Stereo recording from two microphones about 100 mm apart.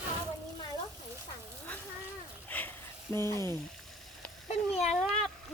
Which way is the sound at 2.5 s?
20° left (ahead or behind).